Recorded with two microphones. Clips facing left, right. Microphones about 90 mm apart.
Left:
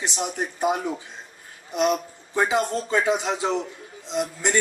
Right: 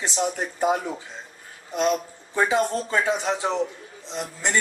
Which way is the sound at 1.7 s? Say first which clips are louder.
Left 1 dB; 20° left (ahead or behind).